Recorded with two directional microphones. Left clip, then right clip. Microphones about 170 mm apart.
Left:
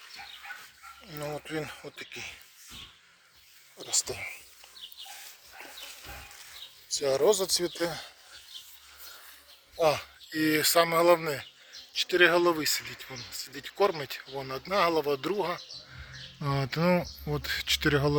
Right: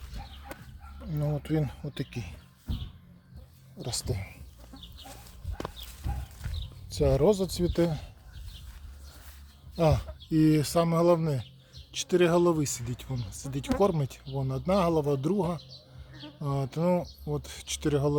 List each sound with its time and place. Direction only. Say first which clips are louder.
1.1 s speech: right 3 dB; 5° right (ahead or behind)
3.8 s speech: left 4 dB; 15° right (ahead or behind)
6.9 s speech: even; 5° right (ahead or behind)
9.7 s speech: left 1 dB; 10° right (ahead or behind)